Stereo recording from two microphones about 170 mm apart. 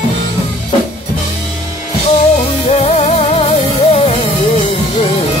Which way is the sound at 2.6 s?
40° left (ahead or behind).